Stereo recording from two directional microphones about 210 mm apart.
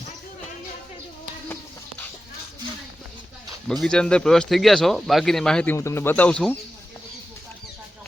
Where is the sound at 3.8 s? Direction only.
5° left (ahead or behind).